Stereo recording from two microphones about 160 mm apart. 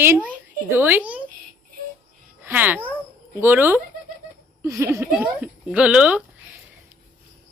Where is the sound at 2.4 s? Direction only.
10° right (ahead or behind).